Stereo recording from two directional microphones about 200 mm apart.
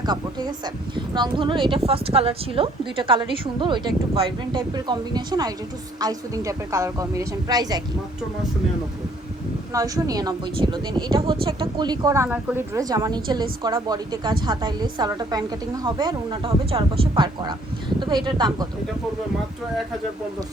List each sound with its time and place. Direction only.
0.0 s a woman's voice: 20° right (ahead or behind)
9.7 s a woman's voice: 20° right (ahead or behind)